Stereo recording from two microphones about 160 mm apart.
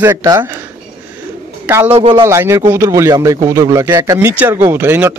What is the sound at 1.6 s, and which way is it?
Speech, 10° right (ahead or behind).